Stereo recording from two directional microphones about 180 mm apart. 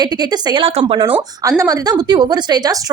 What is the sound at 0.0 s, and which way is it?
A woman's voice, 25° right (ahead or behind).